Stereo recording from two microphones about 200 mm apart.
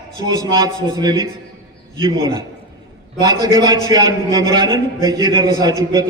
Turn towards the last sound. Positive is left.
turn(degrees=-20)  # may be behind; listen again after turning